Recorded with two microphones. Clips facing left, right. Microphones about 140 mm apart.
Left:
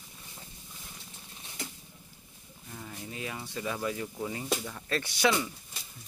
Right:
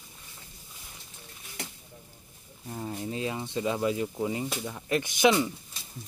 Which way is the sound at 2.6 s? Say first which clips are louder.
Right 8 dB; 35° right (ahead or behind).